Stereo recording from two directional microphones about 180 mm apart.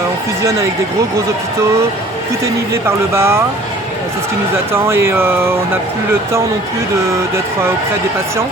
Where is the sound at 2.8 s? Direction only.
15° right (ahead or behind).